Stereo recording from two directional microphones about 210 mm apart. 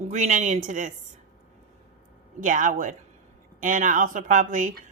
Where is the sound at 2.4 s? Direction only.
40° right (ahead or behind).